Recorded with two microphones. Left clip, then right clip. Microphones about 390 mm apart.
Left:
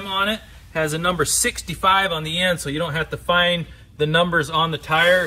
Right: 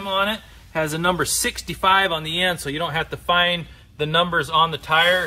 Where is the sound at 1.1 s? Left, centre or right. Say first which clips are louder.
Left 2 dB; right.